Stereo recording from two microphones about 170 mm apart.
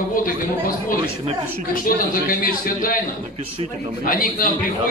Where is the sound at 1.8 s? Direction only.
55° left (ahead or behind).